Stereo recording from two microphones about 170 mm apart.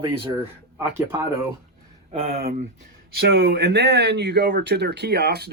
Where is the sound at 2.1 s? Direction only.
35° right (ahead or behind).